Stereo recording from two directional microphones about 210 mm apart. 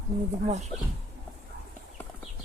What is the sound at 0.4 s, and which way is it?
Speech, 30° right (ahead or behind).